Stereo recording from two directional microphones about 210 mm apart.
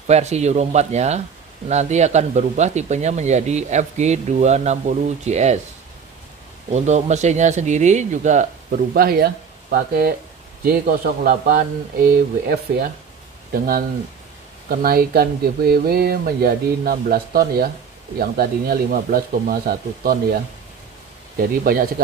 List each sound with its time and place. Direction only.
0.0 s speech: 30° right (ahead or behind)
6.7 s speech: 35° right (ahead or behind)
21.4 s speech: 45° right (ahead or behind)